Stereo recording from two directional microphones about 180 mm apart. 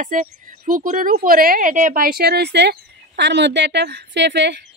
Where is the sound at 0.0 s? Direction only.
45° right (ahead or behind).